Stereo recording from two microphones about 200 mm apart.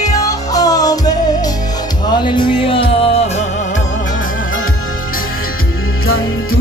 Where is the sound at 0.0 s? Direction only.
15° left (ahead or behind).